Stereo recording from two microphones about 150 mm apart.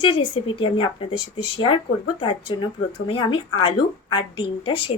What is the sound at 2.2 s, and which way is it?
A woman's voice, 35° left (ahead or behind).